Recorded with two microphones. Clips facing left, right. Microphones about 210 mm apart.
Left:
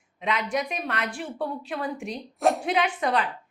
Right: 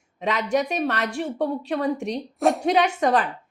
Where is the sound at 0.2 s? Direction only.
40° right (ahead or behind).